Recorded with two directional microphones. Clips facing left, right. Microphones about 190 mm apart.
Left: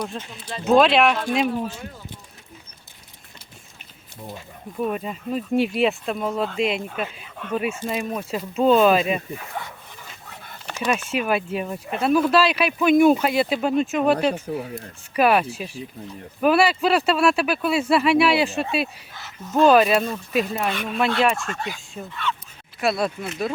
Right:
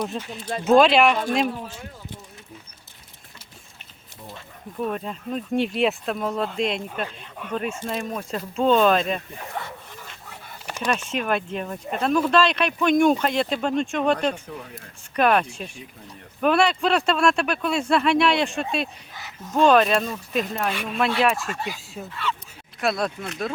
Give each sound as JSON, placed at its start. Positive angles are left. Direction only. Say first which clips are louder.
{"t": 0.0, "sound": "speech", "louder": "right 2 dB", "side_deg": 0}
{"t": 4.4, "sound": "speech", "louder": "left 2 dB", "side_deg": 5}
{"t": 10.8, "sound": "speech", "louder": "left 2 dB", "side_deg": 5}
{"t": 14.3, "sound": "speech", "louder": "left 8 dB", "side_deg": 35}
{"t": 15.1, "sound": "speech", "louder": "left 1 dB", "side_deg": 5}